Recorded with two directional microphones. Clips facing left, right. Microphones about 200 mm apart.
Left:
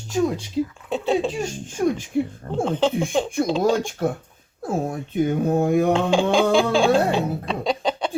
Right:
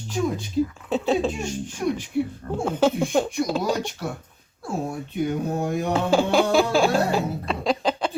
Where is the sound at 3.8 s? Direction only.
50° left (ahead or behind).